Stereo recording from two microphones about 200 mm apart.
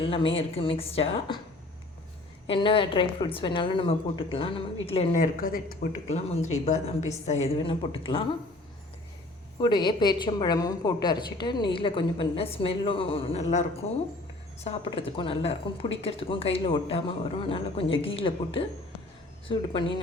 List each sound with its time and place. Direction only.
0.0 s a woman's voice: 25° left (ahead or behind)
2.5 s a woman's voice: 25° left (ahead or behind)
5.1 s a woman's voice: 45° left (ahead or behind)
6.1 s a woman's voice: 35° left (ahead or behind)
9.6 s a woman's voice: 20° left (ahead or behind)